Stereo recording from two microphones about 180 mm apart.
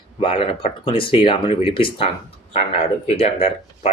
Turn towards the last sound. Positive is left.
turn(degrees=35)  # may be behind; listen again after turning